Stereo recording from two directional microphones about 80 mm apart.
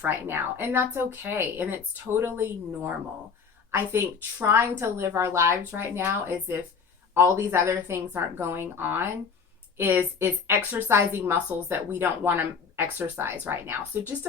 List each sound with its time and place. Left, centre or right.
0.0 s a woman's voice: right